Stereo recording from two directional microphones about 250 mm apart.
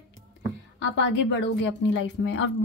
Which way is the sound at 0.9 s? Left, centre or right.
Left.